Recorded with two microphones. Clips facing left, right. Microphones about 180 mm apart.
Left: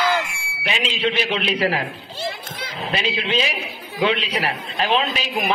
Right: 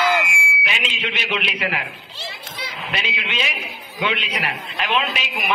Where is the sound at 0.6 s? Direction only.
35° left (ahead or behind).